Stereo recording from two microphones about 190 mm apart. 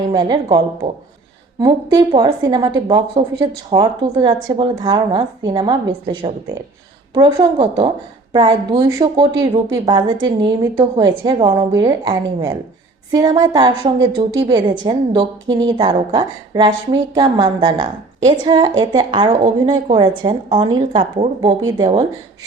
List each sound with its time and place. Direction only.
0.1 s a woman's voice: 20° right (ahead or behind)